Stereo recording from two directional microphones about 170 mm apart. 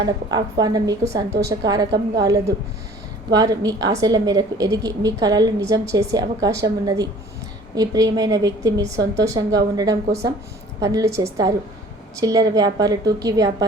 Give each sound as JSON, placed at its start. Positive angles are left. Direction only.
{"t": 0.0, "sound": "a woman's voice", "side_deg": -25}